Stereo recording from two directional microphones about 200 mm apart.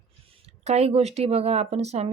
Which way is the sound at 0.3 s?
30° right (ahead or behind).